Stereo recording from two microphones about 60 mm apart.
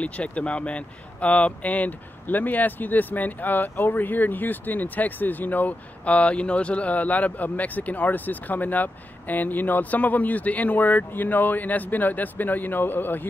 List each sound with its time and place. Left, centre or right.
0.0 s speech: left